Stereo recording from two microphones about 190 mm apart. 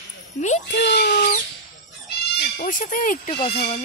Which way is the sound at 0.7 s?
60° left (ahead or behind).